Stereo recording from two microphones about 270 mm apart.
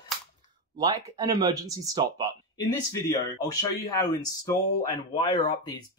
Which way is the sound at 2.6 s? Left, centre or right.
Centre.